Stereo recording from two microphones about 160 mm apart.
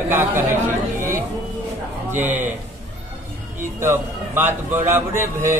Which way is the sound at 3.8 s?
15° right (ahead or behind).